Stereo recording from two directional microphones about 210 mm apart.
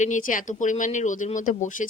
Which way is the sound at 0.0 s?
40° left (ahead or behind).